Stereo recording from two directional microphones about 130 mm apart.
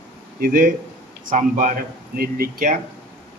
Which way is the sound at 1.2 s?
90° right.